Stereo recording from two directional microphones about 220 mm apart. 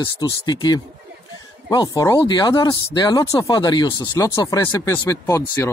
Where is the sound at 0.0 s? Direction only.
20° left (ahead or behind).